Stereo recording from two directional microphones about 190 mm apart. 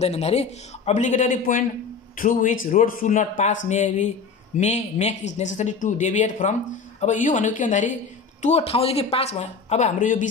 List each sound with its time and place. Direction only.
0.0 s a man's voice: 35° left (ahead or behind)